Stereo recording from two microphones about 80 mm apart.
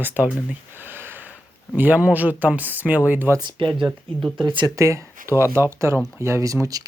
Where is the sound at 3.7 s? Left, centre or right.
Centre.